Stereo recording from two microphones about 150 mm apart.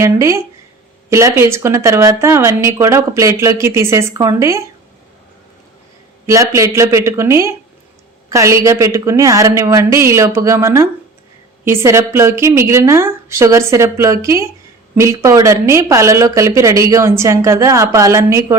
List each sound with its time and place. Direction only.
0.0 s speech: 20° right (ahead or behind)
6.2 s a woman's voice: 20° right (ahead or behind)